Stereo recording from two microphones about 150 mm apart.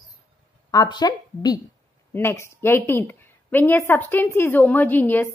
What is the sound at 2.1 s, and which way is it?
A woman's voice, 15° left (ahead or behind).